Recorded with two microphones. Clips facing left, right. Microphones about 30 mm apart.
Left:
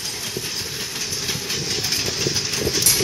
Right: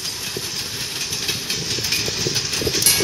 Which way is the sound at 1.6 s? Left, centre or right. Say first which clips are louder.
Right 1 dB; centre.